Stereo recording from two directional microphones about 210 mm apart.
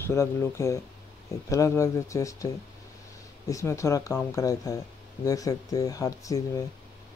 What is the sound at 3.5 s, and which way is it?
Speech, 15° left (ahead or behind).